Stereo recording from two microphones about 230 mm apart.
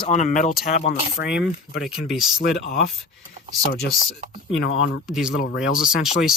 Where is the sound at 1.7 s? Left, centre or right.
Centre.